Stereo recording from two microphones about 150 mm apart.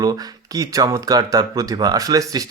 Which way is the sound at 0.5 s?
25° right (ahead or behind).